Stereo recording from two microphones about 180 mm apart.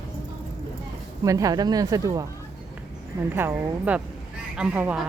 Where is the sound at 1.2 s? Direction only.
20° right (ahead or behind).